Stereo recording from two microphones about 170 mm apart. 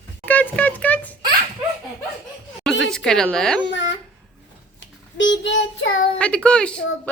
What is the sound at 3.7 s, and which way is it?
Speech, 90° left.